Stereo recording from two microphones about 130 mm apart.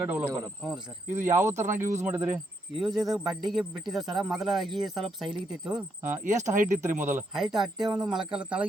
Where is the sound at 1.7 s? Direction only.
80° right.